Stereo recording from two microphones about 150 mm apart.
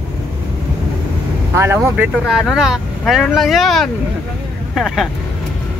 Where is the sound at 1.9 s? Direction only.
5° right (ahead or behind).